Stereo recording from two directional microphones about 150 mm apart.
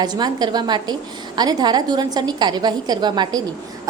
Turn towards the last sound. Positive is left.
turn(degrees=-30)  # may be behind; listen again after turning